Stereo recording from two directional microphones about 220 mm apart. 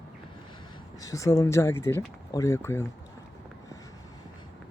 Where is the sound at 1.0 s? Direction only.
15° left (ahead or behind).